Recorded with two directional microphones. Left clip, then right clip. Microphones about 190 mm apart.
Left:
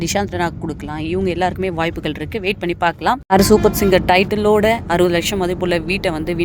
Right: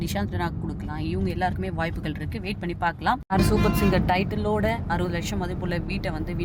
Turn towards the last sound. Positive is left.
turn(degrees=25)  # may be behind; listen again after turning